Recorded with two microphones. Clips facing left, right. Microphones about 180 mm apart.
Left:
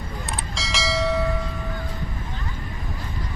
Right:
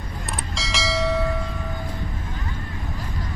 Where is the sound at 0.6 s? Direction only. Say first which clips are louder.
Even; centre (ahead or behind).